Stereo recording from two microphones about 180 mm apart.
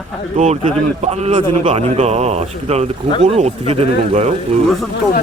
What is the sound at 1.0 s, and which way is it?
A man's voice, 35° right (ahead or behind).